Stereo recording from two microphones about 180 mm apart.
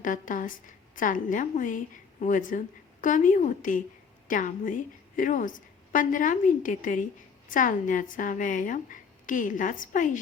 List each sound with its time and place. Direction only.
0.0 s a woman's voice: 45° left (ahead or behind)